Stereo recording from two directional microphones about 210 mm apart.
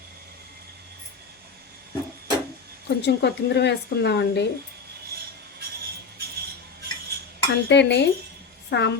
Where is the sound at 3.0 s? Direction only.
55° left (ahead or behind).